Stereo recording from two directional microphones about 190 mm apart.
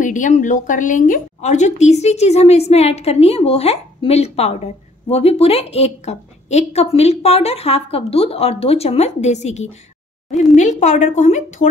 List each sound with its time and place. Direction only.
0.0 s a woman's voice: 40° left (ahead or behind)